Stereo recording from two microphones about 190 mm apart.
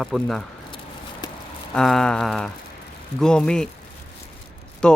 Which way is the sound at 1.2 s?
20° left (ahead or behind).